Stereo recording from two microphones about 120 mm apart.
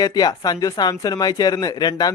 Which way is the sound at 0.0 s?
30° left (ahead or behind).